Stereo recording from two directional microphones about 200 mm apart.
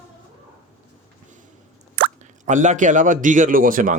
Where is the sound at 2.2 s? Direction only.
40° right (ahead or behind).